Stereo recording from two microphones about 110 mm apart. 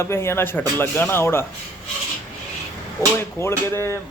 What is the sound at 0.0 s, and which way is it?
Speech, 25° left (ahead or behind).